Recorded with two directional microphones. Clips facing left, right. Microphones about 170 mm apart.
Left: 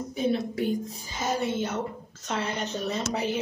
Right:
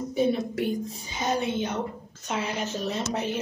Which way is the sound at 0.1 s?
Centre (ahead or behind).